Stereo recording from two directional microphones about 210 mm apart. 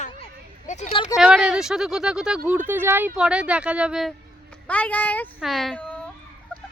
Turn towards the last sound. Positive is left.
turn(degrees=5)  # may be behind; listen again after turning